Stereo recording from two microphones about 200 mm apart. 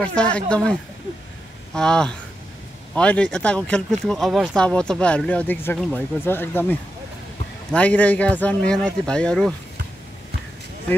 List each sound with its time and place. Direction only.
0.0 s speech: 5° left (ahead or behind)